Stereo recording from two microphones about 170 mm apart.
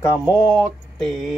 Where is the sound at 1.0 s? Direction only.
Centre (ahead or behind).